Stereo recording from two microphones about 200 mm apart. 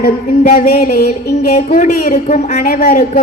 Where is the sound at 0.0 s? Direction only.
45° left (ahead or behind).